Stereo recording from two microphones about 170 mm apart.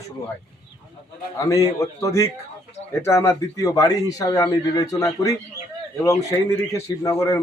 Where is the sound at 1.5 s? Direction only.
20° left (ahead or behind).